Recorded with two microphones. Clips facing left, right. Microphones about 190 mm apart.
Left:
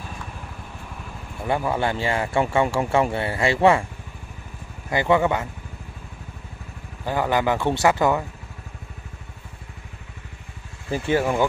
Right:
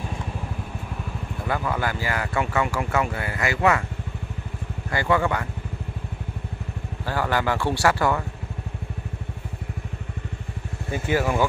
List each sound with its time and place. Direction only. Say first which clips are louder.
1.5 s speech: left 3 dB; 25° left (ahead or behind)
4.8 s speech: left 3 dB; 20° left (ahead or behind)
7.1 s speech: left 3 dB; 20° left (ahead or behind)
10.9 s speech: left 2 dB; 25° left (ahead or behind)